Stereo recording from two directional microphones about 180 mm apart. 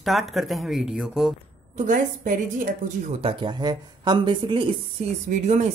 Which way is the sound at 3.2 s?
30° right (ahead or behind).